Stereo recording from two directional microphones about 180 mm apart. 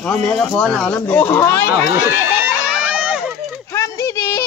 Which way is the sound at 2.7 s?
5° right (ahead or behind).